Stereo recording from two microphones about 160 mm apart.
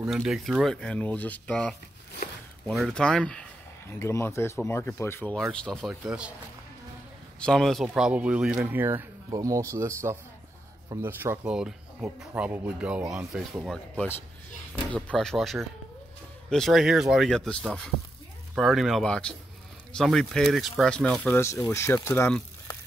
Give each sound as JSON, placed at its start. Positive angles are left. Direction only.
{"t": 0.0, "sound": "speech", "side_deg": -5}
{"t": 4.0, "sound": "speech", "side_deg": 15}
{"t": 7.3, "sound": "speech", "side_deg": 5}
{"t": 21.4, "sound": "speech", "side_deg": 15}